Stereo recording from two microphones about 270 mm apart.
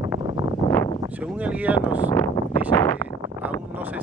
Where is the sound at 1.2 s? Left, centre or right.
Centre.